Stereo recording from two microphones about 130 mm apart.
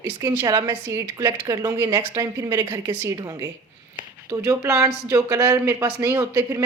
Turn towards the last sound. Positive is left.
turn(degrees=-25)  # may be behind; listen again after turning